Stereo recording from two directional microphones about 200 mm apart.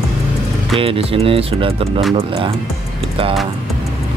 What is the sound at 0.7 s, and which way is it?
Speech, 30° right (ahead or behind).